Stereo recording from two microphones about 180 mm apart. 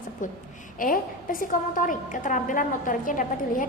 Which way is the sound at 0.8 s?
50° left (ahead or behind).